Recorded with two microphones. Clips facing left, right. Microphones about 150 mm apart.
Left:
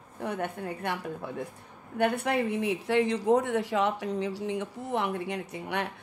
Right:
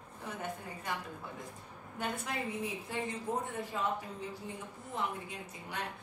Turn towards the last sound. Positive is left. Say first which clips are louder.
# left 9 dB
turn(degrees=70)  # may be behind; listen again after turning